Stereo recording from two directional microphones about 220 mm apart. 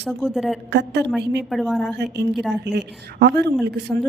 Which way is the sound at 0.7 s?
50° right (ahead or behind).